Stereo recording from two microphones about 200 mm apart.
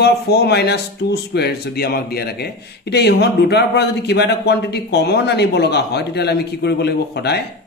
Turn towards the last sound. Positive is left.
turn(degrees=55)  # may be behind; listen again after turning